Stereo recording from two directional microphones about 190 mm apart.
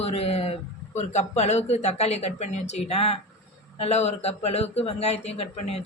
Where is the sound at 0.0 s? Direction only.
30° left (ahead or behind).